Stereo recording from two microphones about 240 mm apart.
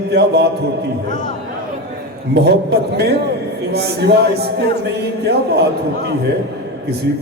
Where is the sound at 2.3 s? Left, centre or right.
Right.